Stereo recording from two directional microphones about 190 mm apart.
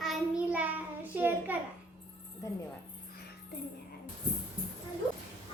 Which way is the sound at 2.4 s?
15° left (ahead or behind).